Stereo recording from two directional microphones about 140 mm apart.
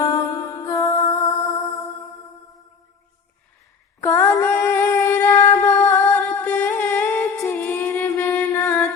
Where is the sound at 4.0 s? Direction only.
15° left (ahead or behind).